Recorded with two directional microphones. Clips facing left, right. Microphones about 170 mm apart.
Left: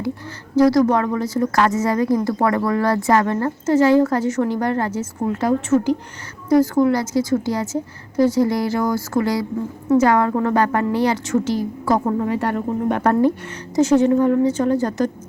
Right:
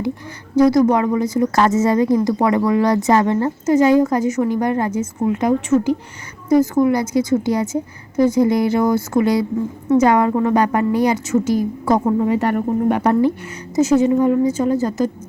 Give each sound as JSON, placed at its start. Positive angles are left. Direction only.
{"t": 0.5, "sound": "a woman's voice", "side_deg": -15}